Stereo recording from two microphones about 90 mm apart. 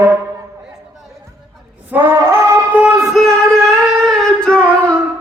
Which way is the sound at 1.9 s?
20° right (ahead or behind).